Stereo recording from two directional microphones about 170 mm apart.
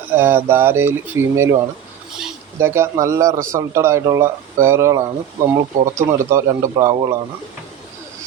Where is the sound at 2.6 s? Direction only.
15° right (ahead or behind).